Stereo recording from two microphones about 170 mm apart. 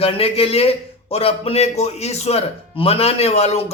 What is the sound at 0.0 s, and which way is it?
A man's voice, 35° left (ahead or behind).